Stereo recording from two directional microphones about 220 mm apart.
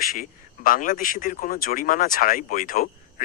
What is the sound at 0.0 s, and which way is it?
Speech, 40° left (ahead or behind).